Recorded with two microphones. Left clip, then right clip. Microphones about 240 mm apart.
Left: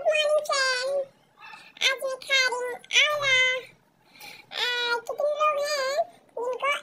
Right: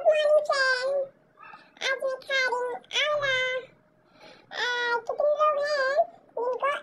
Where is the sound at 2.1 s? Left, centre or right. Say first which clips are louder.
Left 2 dB; centre.